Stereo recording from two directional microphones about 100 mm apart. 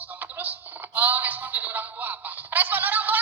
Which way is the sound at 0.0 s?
15° right (ahead or behind).